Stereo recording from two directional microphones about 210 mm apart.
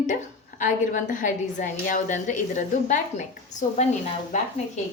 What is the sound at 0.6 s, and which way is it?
A woman's voice, 35° left (ahead or behind).